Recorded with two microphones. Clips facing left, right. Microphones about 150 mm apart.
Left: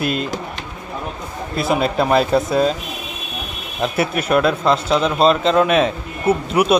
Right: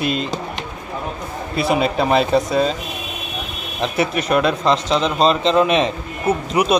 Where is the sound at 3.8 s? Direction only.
5° left (ahead or behind).